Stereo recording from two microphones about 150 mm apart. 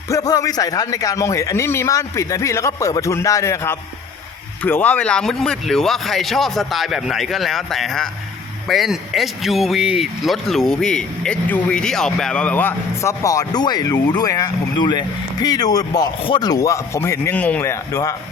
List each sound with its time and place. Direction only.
0.1 s speech: 25° left (ahead or behind)